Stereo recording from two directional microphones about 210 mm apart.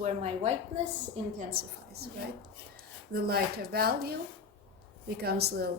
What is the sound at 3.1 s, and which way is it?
A woman's voice, 45° right (ahead or behind).